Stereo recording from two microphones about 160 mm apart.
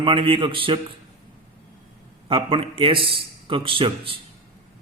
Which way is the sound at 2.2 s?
35° right (ahead or behind).